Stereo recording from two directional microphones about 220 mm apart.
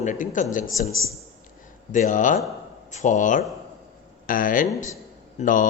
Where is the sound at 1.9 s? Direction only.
35° left (ahead or behind).